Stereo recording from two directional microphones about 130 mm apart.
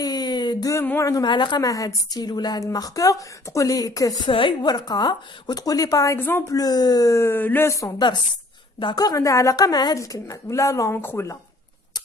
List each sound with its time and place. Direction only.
0.0 s a sound: 35° left (ahead or behind)
0.8 s a woman's voice: 25° left (ahead or behind)
4.3 s a woman's voice: 40° left (ahead or behind)
6.1 s speech: 15° left (ahead or behind)
6.5 s a woman's voice: 30° left (ahead or behind)